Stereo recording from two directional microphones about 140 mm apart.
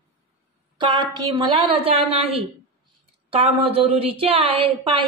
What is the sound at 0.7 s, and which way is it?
A woman's voice, 35° right (ahead or behind).